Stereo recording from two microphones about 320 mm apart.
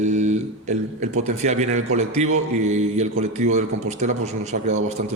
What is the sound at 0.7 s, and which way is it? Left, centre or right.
A man's voice, right.